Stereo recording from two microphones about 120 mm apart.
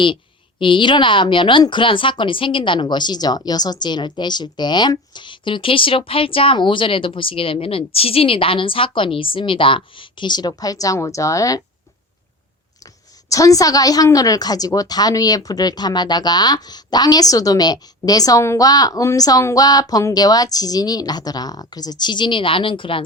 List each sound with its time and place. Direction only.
0.6 s a woman's voice: 45° left (ahead or behind); by 11.6 s 30° left (ahead or behind)
13.3 s a woman's voice: 30° left (ahead or behind); by 23.0 s 45° left (ahead or behind)